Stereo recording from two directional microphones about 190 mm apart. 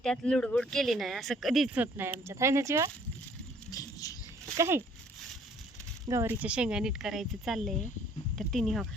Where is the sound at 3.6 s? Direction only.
20° left (ahead or behind).